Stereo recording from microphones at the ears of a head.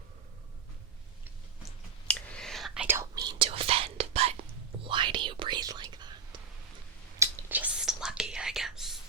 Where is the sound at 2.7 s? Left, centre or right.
Right.